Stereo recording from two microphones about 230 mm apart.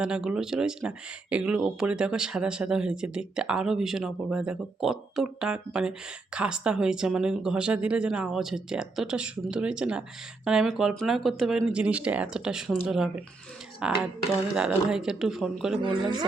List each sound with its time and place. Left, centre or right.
0.0 s speech: centre
15.8 s a woman's voice: right